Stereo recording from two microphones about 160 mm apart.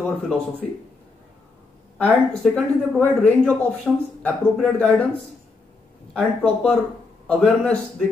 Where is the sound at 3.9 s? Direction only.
10° right (ahead or behind).